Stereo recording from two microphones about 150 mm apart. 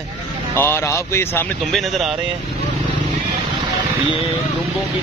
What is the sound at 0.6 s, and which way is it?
Speech, 15° left (ahead or behind).